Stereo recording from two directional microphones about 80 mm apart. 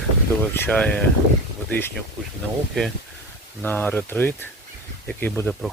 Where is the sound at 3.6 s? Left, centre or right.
Left.